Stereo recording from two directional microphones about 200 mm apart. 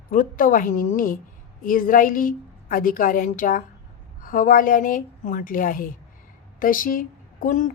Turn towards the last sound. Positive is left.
turn(degrees=40)  # may be behind; listen again after turning